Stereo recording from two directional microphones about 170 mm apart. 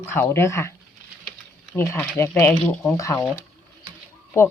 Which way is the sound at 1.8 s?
15° left (ahead or behind).